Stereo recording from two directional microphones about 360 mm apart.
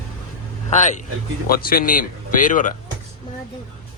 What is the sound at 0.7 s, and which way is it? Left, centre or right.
Speech, centre.